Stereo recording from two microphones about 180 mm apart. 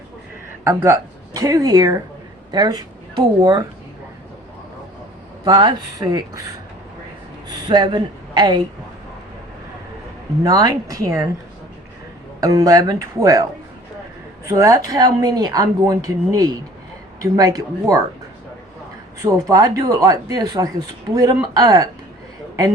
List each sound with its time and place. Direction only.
0.7 s speech: 15° right (ahead or behind)
5.5 s speech: 25° right (ahead or behind)
7.5 s speech: 25° right (ahead or behind)
10.4 s speech: 20° right (ahead or behind)
12.4 s speech: 20° right (ahead or behind)
19.2 s speech: 20° right (ahead or behind)